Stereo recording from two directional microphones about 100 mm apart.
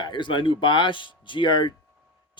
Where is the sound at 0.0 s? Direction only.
55° left (ahead or behind).